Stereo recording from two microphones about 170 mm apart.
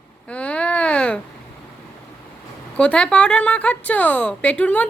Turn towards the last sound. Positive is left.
turn(degrees=10)  # may be behind; listen again after turning